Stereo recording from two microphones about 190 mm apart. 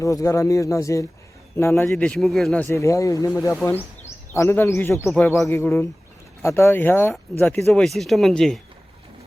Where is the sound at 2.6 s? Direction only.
15° left (ahead or behind).